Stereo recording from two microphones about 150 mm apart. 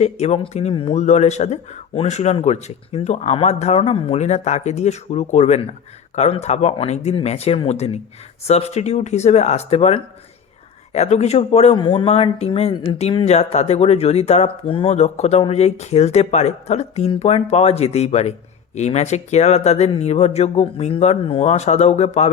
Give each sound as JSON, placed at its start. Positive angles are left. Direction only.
{"t": 0.0, "sound": "speech", "side_deg": 45}
{"t": 0.7, "sound": "speech", "side_deg": 35}
{"t": 0.9, "sound": "speech", "side_deg": 50}
{"t": 14.9, "sound": "speech", "side_deg": 45}